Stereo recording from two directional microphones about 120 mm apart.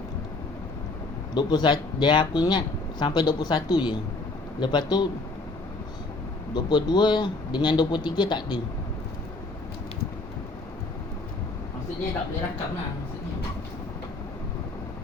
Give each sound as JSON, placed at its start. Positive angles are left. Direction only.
{"t": 1.3, "sound": "speech", "side_deg": 35}
{"t": 6.5, "sound": "speech", "side_deg": 40}